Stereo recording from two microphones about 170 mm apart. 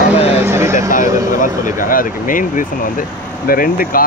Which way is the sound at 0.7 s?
50° left (ahead or behind).